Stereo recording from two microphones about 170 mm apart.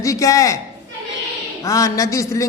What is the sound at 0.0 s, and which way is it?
Speech, 20° left (ahead or behind).